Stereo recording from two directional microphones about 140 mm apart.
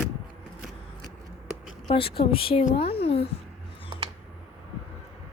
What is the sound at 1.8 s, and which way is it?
A woman's voice, 40° left (ahead or behind).